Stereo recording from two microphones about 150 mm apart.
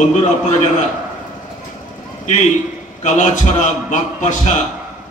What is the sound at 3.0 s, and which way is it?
A man's voice, 50° left (ahead or behind).